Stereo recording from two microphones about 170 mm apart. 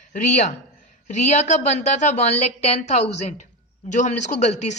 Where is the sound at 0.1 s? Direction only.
45° left (ahead or behind).